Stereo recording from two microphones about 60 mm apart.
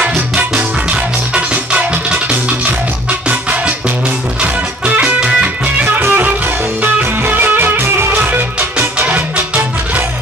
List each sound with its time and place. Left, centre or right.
0.6 s music: right
5.9 s music: right